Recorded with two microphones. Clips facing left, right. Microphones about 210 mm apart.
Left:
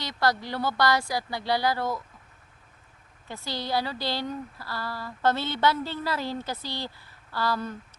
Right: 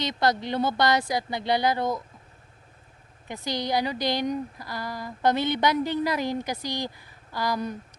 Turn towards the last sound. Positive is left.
turn(degrees=-15)  # may be behind; listen again after turning